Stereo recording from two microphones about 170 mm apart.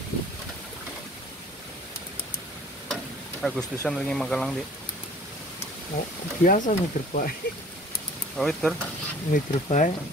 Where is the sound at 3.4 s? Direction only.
5° left (ahead or behind).